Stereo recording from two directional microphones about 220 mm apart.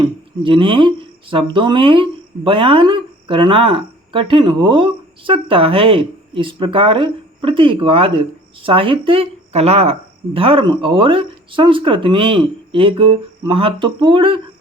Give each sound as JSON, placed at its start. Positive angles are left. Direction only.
{"t": 0.0, "sound": "speech", "side_deg": -20}